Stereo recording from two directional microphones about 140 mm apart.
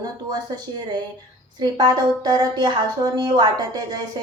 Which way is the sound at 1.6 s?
30° right (ahead or behind).